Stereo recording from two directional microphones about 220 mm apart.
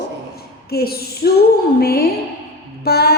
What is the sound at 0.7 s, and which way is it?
A woman's voice, 45° left (ahead or behind).